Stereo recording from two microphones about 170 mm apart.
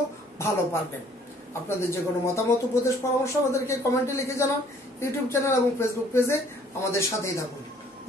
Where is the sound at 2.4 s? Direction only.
15° left (ahead or behind).